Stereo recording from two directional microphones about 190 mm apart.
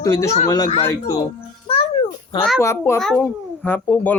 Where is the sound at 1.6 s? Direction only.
30° left (ahead or behind).